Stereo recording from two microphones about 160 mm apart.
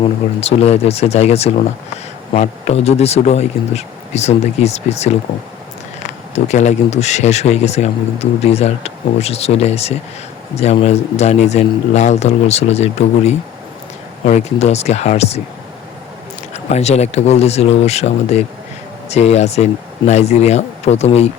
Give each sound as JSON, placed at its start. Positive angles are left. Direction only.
{"t": 0.0, "sound": "speech", "side_deg": 40}
{"t": 6.3, "sound": "speech", "side_deg": 45}
{"t": 16.7, "sound": "speech", "side_deg": 45}